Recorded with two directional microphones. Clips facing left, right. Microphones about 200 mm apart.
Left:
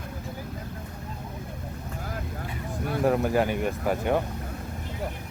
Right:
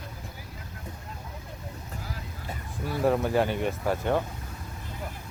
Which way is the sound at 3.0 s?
Centre (ahead or behind).